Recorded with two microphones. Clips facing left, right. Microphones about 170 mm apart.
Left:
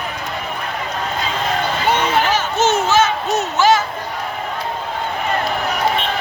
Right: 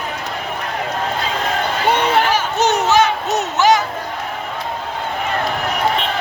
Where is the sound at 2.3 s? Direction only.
15° right (ahead or behind).